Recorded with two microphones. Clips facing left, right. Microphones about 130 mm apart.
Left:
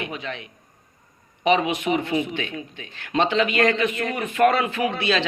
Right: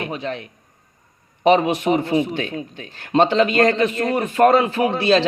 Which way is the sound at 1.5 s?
40° right (ahead or behind).